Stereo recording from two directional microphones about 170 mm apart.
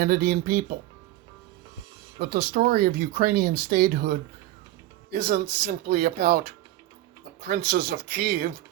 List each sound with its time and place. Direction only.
0.0 s speech: 60° right (ahead or behind)
2.1 s speech: 60° right (ahead or behind)
7.4 s speech: 70° right (ahead or behind)